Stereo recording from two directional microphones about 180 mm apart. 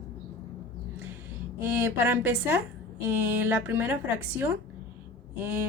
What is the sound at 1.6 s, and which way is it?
A woman's voice, 10° right (ahead or behind).